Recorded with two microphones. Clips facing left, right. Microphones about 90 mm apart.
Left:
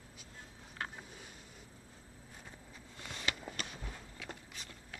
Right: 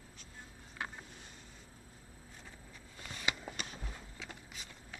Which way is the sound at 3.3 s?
15° right (ahead or behind).